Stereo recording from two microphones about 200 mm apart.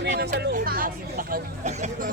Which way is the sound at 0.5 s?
45° right (ahead or behind).